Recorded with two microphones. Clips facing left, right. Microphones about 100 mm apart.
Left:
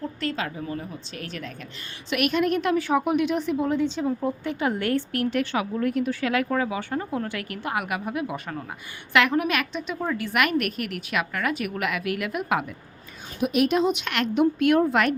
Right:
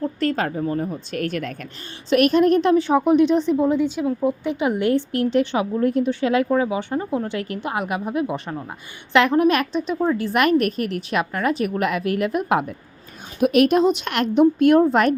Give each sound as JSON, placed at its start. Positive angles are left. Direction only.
{"t": 0.2, "sound": "a woman's voice", "side_deg": -45}
{"t": 2.0, "sound": "a woman's voice", "side_deg": -35}
{"t": 13.4, "sound": "a woman's voice", "side_deg": -55}
{"t": 13.9, "sound": "a woman's voice", "side_deg": -40}